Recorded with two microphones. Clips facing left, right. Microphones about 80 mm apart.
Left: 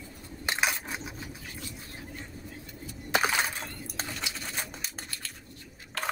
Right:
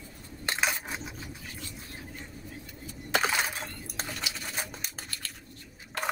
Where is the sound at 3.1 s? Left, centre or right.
Centre.